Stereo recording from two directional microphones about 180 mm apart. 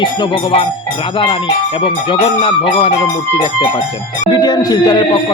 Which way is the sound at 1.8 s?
30° left (ahead or behind).